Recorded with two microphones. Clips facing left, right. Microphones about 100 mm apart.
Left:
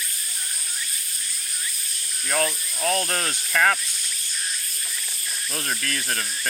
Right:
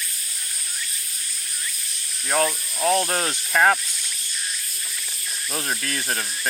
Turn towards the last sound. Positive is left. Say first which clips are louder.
# right 1 dB
turn(degrees=-25)  # may be behind; listen again after turning